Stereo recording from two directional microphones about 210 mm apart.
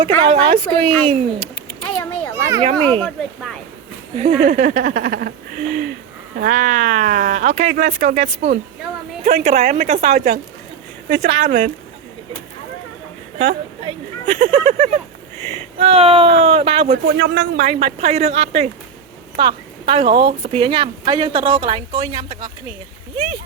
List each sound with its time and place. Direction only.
0.3 s speech: 30° right (ahead or behind)
0.9 s speech: 5° left (ahead or behind)
1.8 s a sound: 10° left (ahead or behind)
2.3 s a sound: 15° right (ahead or behind)
2.7 s speech: 5° left (ahead or behind)
4.1 s speech: 35° right (ahead or behind)
14.3 s speech: 40° right (ahead or behind)
17.1 s speech: 60° right (ahead or behind)
17.6 s speech: 30° right (ahead or behind)